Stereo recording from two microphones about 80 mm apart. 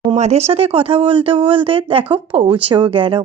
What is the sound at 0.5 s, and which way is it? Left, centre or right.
Speech, right.